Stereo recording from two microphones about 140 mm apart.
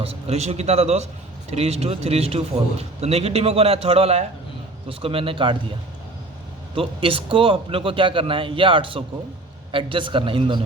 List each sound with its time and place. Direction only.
0.0 s a man's voice: 45° right (ahead or behind)
6.7 s a man's voice: 40° right (ahead or behind)